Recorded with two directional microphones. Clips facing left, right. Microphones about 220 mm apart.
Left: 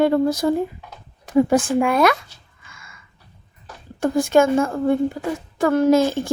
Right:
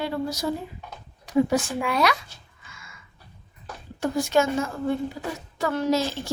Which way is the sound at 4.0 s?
50° left (ahead or behind).